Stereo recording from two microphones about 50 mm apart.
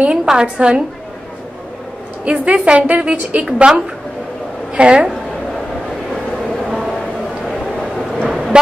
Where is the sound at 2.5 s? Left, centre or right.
Right.